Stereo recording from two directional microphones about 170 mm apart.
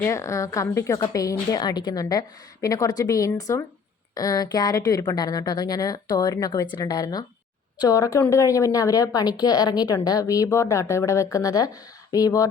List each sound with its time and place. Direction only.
0.0 s a woman's voice: 15° left (ahead or behind)